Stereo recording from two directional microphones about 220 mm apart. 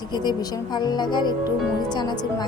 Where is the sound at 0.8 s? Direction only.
20° left (ahead or behind).